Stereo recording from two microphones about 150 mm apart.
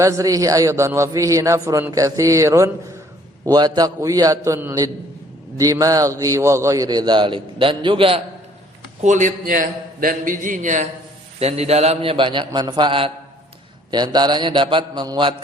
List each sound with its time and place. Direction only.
0.0 s a man's voice: 20° right (ahead or behind)
9.0 s a man's voice: 55° right (ahead or behind)
11.3 s a man's voice: 45° right (ahead or behind); by 15.4 s 30° right (ahead or behind)